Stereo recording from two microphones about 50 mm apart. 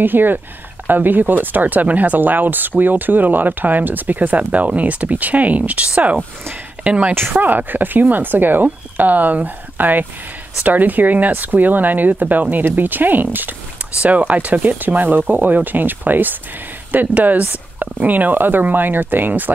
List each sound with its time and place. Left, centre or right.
0.0 s speech: right
7.2 s speech: right